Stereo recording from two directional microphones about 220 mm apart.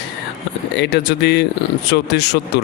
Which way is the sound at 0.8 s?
50° left (ahead or behind).